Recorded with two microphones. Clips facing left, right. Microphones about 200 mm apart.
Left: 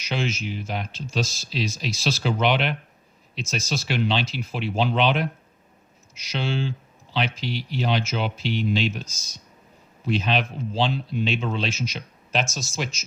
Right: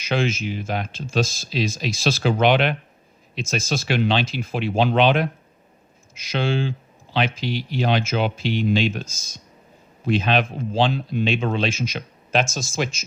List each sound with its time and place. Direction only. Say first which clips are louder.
0.1 s speech: right 5 dB; 50° right (ahead or behind)
6.3 s speech: right 4 dB; 50° right (ahead or behind)